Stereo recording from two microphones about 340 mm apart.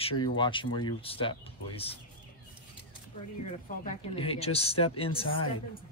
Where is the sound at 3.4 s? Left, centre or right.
Centre.